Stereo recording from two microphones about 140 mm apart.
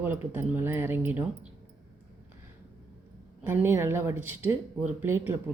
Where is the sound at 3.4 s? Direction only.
15° right (ahead or behind).